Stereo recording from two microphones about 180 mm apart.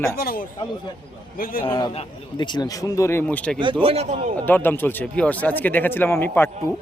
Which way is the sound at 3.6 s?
30° right (ahead or behind).